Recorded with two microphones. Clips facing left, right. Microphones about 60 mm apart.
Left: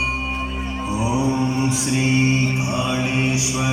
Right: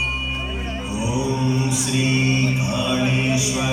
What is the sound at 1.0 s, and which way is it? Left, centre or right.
Mantra, left.